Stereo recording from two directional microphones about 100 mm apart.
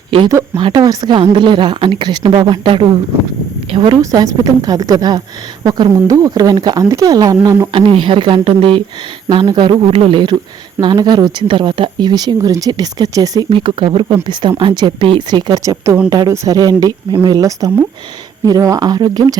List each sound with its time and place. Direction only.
0.5 s speech: 45° right (ahead or behind)
1.2 s a woman's voice: 55° right (ahead or behind)
4.0 s speech: 35° right (ahead or behind)
5.9 s speech: 35° right (ahead or behind)
7.7 s speech: 60° right (ahead or behind)
10.8 s speech: 45° right (ahead or behind)
13.5 s speech: 55° right (ahead or behind)
15.6 s speech: 30° right (ahead or behind)
16.0 s speech: 40° right (ahead or behind)